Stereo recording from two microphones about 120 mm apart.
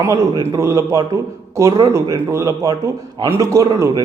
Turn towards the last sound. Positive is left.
turn(degrees=-25)  # may be behind; listen again after turning